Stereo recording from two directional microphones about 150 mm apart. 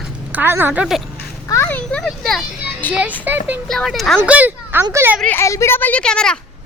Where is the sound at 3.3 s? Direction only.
10° right (ahead or behind).